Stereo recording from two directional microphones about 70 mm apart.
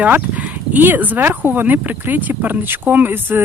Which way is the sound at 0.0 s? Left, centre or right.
Right.